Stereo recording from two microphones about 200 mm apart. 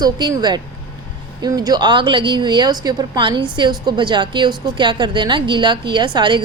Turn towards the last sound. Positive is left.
turn(degrees=-25)  # may be behind; listen again after turning